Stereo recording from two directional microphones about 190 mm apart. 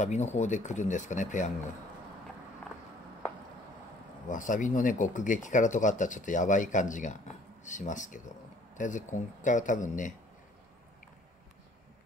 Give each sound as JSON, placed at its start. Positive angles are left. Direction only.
{"t": 0.0, "sound": "speech", "side_deg": 35}
{"t": 4.3, "sound": "speech", "side_deg": 45}